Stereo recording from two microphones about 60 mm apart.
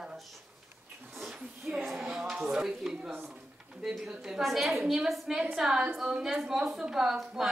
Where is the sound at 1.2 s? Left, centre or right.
Centre.